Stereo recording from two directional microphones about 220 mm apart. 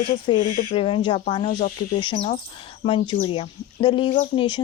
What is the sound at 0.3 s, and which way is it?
Speech, 35° left (ahead or behind).